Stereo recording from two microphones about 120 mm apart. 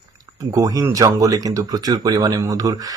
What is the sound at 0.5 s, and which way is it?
Speech, 30° right (ahead or behind).